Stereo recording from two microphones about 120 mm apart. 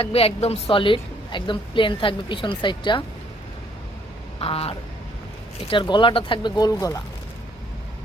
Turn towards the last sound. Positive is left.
turn(degrees=30)  # may be behind; listen again after turning